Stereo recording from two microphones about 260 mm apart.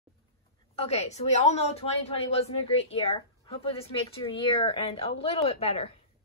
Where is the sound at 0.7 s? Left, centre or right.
Left.